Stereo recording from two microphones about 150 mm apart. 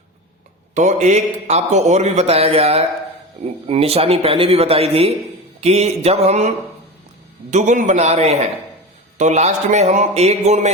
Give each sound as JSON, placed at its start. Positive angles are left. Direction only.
{"t": 0.7, "sound": "a man's voice", "side_deg": -55}
{"t": 7.5, "sound": "a man's voice", "side_deg": -55}